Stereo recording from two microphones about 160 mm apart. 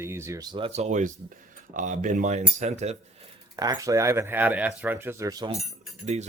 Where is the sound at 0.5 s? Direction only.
40° right (ahead or behind).